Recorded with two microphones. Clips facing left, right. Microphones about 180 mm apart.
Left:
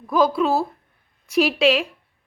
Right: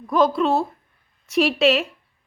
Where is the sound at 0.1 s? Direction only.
Centre (ahead or behind).